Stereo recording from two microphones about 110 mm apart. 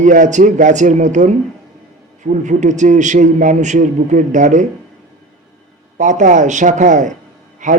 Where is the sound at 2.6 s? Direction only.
90° right.